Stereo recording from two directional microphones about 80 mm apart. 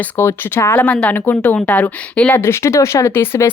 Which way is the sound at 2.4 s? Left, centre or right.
Left.